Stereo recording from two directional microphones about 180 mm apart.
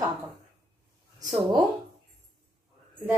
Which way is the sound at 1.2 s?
20° right (ahead or behind).